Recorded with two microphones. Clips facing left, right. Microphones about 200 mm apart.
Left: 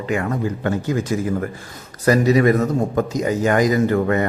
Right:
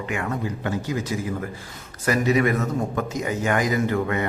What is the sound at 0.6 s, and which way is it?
Speech, 55° left (ahead or behind).